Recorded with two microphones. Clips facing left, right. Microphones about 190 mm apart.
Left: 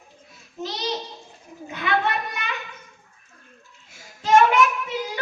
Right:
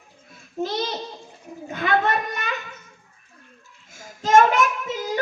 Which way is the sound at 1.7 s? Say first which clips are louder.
Right 2 dB; 45° right (ahead or behind).